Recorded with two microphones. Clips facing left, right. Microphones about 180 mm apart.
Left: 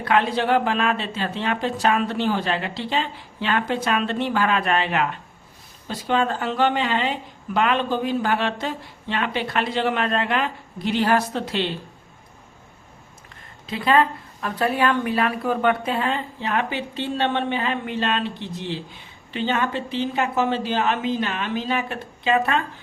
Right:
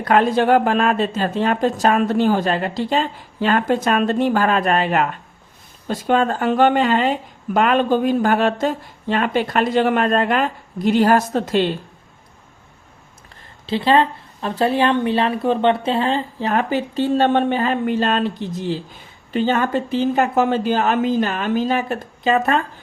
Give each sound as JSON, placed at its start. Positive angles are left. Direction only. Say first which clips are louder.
{"t": 0.0, "sound": "speech", "louder": "right 5 dB", "side_deg": -45}
{"t": 13.7, "sound": "speech", "louder": "right 3 dB", "side_deg": -30}